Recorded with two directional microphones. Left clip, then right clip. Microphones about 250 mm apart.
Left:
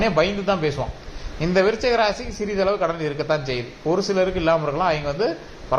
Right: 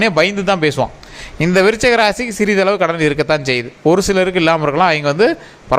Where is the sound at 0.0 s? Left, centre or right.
Right.